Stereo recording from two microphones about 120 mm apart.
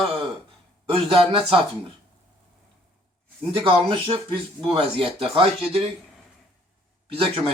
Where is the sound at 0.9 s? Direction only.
50° right (ahead or behind).